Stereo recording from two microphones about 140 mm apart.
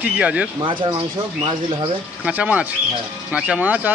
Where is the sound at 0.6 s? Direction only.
35° right (ahead or behind).